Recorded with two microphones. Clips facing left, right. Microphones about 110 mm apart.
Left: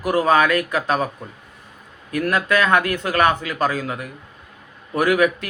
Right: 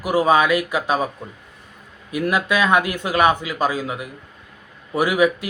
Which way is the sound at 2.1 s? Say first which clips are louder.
Left 1 dB; 15° right (ahead or behind).